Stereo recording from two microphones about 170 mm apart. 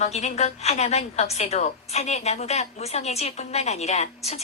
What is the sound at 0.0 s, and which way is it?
A woman's voice, 40° left (ahead or behind).